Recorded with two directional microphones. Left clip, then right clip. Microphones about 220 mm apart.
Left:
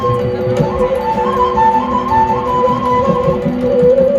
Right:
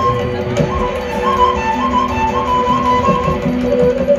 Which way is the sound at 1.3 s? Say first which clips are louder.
Left 3 dB; 55° left (ahead or behind).